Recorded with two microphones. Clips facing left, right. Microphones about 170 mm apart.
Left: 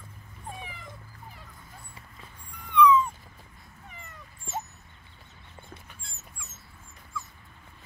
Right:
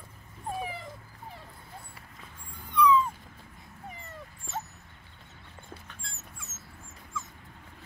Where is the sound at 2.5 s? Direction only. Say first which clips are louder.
Left 3 dB; 35° right (ahead or behind).